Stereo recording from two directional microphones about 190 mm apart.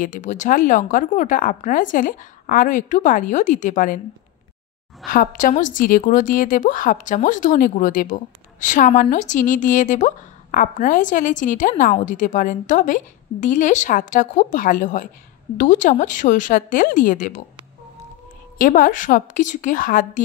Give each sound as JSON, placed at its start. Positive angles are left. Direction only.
{"t": 0.0, "sound": "speech", "side_deg": 40}
{"t": 5.0, "sound": "speech", "side_deg": 45}
{"t": 18.6, "sound": "speech", "side_deg": 45}